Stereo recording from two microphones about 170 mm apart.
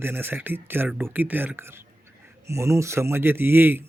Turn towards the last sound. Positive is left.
turn(degrees=-15)  # may be behind; listen again after turning